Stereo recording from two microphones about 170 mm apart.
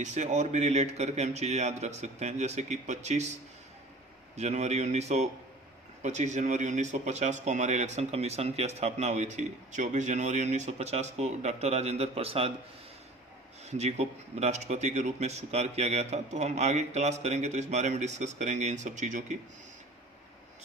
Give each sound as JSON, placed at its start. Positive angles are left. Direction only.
{"t": 0.0, "sound": "a man's voice", "side_deg": -45}
{"t": 4.4, "sound": "a man's voice", "side_deg": -40}
{"t": 13.7, "sound": "speech", "side_deg": -40}